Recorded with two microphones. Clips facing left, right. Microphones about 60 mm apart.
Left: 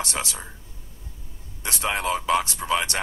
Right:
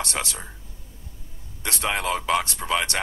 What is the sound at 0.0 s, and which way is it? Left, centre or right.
Speech, right.